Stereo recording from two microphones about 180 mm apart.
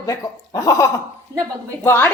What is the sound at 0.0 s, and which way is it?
A woman's voice, 20° left (ahead or behind).